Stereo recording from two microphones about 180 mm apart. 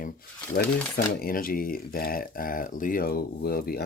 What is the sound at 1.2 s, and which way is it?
Speech, 55° left (ahead or behind).